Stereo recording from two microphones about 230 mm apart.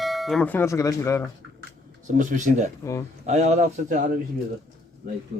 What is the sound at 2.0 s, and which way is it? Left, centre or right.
Speech, right.